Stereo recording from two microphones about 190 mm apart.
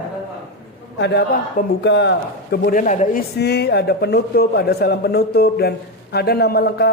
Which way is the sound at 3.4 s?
60° left (ahead or behind).